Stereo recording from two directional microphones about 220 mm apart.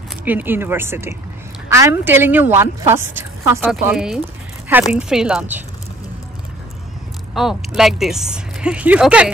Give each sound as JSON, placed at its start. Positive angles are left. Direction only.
{"t": 0.2, "sound": "a woman's voice", "side_deg": -10}
{"t": 7.3, "sound": "speech", "side_deg": 0}